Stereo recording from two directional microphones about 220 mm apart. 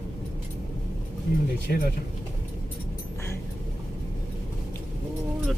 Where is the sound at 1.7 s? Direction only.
40° left (ahead or behind).